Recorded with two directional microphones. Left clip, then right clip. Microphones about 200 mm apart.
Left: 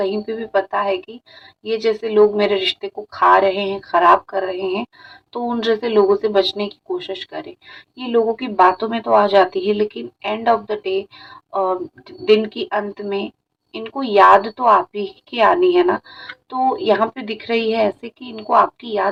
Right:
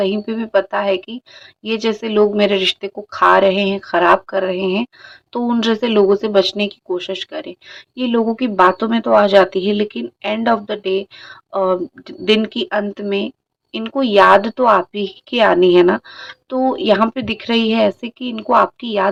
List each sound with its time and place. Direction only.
0.0 s speech: 40° right (ahead or behind)